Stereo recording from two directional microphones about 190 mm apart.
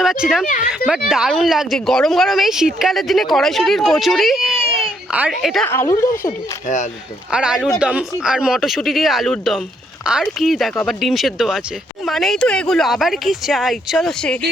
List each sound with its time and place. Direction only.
0.0 s speech: centre (ahead or behind)
0.4 s speech: 45° left (ahead or behind)
0.9 s speech: 5° right (ahead or behind)
5.6 s speech: 15° left (ahead or behind)
7.3 s speech: 5° right (ahead or behind)